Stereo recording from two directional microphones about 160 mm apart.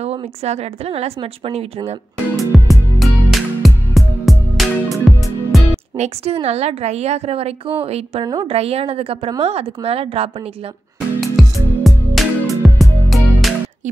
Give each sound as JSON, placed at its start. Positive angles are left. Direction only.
{"t": 0.0, "sound": "a woman's voice", "side_deg": -40}
{"t": 2.3, "sound": "music", "side_deg": 0}
{"t": 5.9, "sound": "a woman's voice", "side_deg": -40}
{"t": 11.1, "sound": "music", "side_deg": 0}